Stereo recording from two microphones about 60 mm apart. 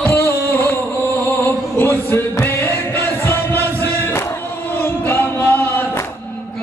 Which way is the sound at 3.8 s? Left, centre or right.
Left.